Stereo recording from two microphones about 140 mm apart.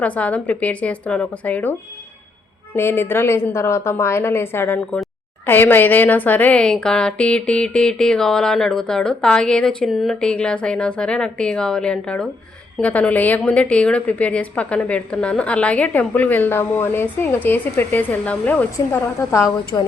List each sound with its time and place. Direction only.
0.0 s a woman's voice: 10° left (ahead or behind)
2.7 s a woman's voice: 15° left (ahead or behind)
19.3 s a woman's voice: 25° left (ahead or behind)